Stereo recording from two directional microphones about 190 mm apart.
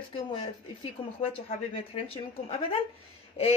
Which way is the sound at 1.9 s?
30° left (ahead or behind).